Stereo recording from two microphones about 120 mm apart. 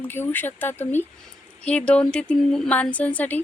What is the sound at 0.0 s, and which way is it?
A woman's voice, 15° left (ahead or behind).